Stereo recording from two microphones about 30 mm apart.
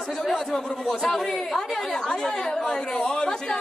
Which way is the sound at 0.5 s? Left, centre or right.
Left.